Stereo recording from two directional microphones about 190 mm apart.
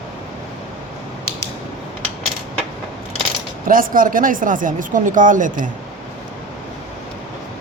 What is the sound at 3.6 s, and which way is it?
A man's voice, 45° right (ahead or behind).